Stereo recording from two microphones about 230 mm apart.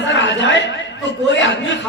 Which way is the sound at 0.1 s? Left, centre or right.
Left.